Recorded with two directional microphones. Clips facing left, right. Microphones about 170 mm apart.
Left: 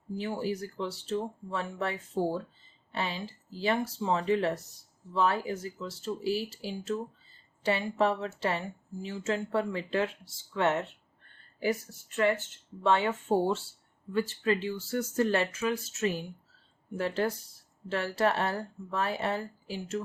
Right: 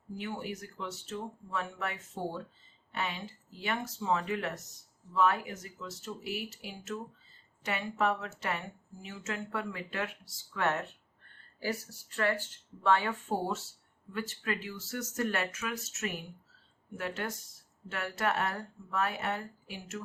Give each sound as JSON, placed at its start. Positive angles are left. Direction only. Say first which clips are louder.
{"t": 0.2, "sound": "speech", "louder": "left 6 dB", "side_deg": 35}